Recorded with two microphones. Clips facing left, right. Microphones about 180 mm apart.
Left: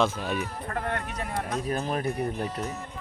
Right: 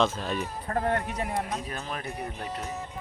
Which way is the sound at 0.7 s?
35° right (ahead or behind).